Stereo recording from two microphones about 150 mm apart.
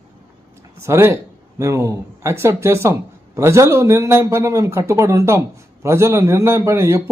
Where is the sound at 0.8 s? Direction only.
15° right (ahead or behind).